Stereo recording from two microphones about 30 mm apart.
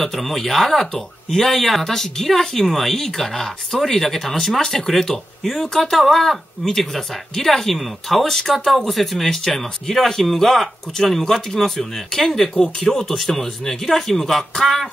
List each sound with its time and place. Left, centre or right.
0.0 s speech: centre
8.3 s speech: centre